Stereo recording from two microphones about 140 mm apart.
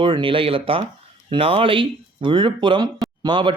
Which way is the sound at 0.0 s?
40° right (ahead or behind).